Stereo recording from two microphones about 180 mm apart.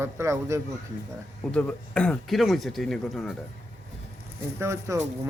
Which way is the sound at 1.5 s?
5° left (ahead or behind).